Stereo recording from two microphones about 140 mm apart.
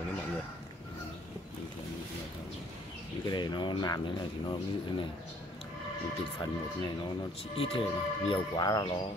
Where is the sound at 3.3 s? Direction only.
30° left (ahead or behind).